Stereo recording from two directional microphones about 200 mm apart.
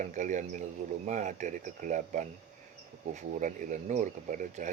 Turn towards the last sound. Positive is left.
turn(degrees=-40)  # may be behind; listen again after turning